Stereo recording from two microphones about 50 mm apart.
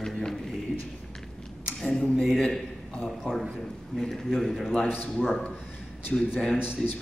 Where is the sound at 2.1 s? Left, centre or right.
Centre.